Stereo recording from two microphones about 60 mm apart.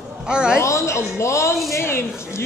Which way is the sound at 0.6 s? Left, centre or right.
Left.